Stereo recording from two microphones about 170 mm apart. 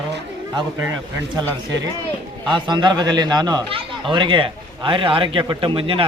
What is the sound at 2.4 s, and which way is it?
Speech, 25° right (ahead or behind).